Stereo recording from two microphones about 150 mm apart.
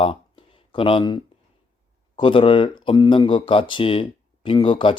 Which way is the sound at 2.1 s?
35° left (ahead or behind).